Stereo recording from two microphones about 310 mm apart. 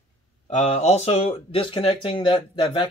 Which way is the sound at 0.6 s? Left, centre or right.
Left.